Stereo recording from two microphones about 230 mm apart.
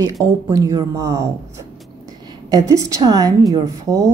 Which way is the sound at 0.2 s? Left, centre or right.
Centre.